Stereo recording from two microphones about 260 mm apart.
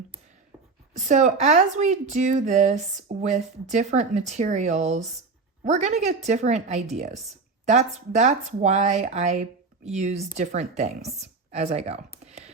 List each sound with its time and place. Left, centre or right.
0.9 s speech: right
12.2 s typing: right